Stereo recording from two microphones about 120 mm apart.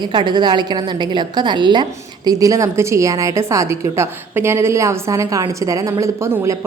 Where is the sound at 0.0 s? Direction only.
40° right (ahead or behind).